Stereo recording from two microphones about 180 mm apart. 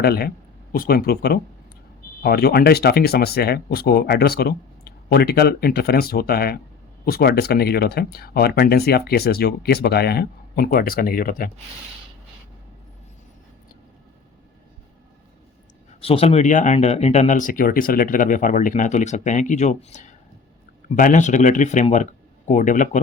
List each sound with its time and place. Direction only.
0.0 s speech: 60° left (ahead or behind)
16.0 s speech: 30° left (ahead or behind)